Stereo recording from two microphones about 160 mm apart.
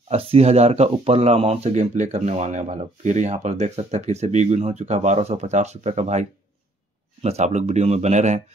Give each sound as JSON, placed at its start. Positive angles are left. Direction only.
{"t": 0.1, "sound": "speech", "side_deg": -40}